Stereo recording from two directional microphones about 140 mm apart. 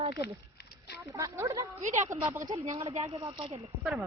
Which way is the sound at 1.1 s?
20° right (ahead or behind).